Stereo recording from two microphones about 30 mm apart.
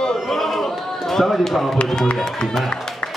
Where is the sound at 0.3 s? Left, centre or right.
Centre.